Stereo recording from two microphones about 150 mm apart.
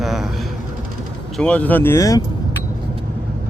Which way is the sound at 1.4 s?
10° left (ahead or behind).